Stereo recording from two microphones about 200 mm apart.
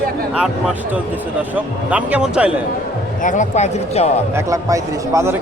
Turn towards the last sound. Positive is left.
turn(degrees=-15)  # may be behind; listen again after turning